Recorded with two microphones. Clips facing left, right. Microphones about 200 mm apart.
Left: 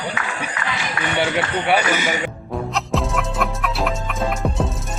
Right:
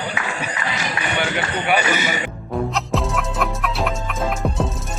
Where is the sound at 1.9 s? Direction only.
10° left (ahead or behind).